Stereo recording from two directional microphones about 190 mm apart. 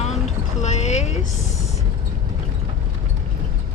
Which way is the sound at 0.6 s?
35° left (ahead or behind).